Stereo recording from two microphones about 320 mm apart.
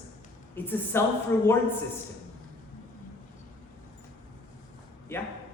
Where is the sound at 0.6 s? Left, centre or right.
Centre.